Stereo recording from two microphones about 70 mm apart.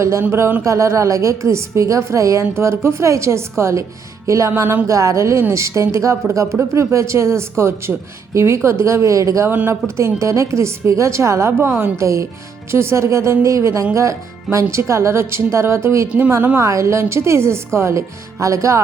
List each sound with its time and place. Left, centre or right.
0.0 s speech: right
0.6 s a woman's voice: right
4.5 s speech: right
4.9 s a woman's voice: right
9.5 s speech: right
10.0 s a woman's voice: right
12.0 s a woman's voice: right